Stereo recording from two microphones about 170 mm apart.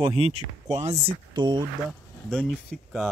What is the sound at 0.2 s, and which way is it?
Speech, 40° right (ahead or behind).